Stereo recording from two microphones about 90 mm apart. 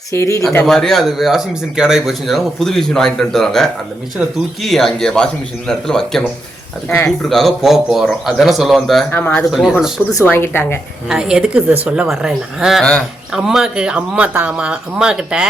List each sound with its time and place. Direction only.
0.1 s speech: 35° left (ahead or behind)
0.6 s speech: 5° left (ahead or behind)
9.1 s speech: 15° left (ahead or behind)
9.4 s speech: 5° right (ahead or behind)
10.2 s a woman's voice: 25° left (ahead or behind)
11.1 s speech: 10° right (ahead or behind)